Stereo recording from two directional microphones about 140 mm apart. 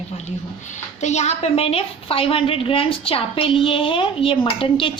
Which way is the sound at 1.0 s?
55° left (ahead or behind).